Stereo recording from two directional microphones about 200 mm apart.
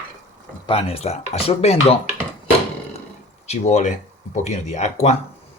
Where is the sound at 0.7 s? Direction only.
30° left (ahead or behind).